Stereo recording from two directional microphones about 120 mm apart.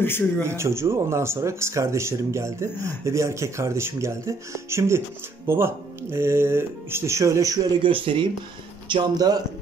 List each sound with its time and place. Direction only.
0.4 s speech: 25° right (ahead or behind)
7.8 s speech: 45° right (ahead or behind)